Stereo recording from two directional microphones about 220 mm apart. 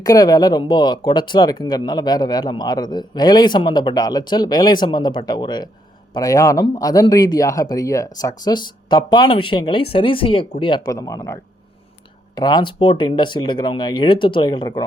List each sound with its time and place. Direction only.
0.0 s speech: 15° left (ahead or behind)